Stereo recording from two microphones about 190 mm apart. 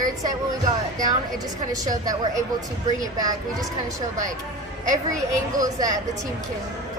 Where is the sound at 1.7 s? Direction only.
20° right (ahead or behind).